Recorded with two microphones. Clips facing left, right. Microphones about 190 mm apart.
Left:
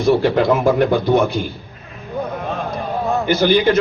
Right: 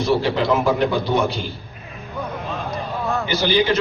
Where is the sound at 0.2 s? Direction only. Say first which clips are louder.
Left 4 dB; 55° left (ahead or behind).